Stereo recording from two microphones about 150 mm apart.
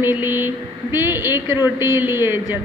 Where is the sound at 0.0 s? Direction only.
15° right (ahead or behind).